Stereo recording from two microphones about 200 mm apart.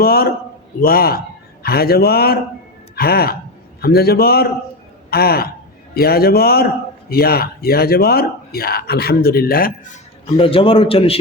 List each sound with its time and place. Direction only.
0.0 s a man's voice: 50° left (ahead or behind)
2.9 s a sound: 50° left (ahead or behind)
3.8 s a man's voice: 50° left (ahead or behind)
10.2 s a man's voice: 25° left (ahead or behind)